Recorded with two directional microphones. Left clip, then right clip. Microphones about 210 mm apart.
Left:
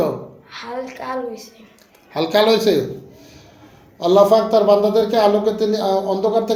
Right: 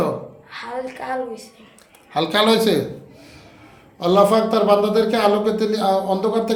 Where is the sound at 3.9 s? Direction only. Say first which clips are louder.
Left 3 dB; 20° right (ahead or behind).